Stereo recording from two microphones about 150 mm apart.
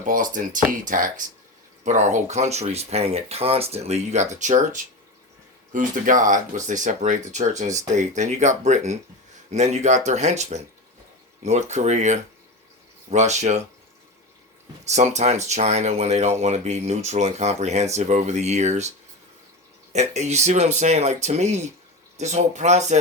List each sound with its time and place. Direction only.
0.0 s speech: 60° right (ahead or behind)
14.8 s speech: 50° right (ahead or behind)